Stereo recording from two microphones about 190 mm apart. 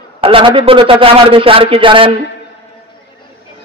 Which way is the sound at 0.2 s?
30° right (ahead or behind).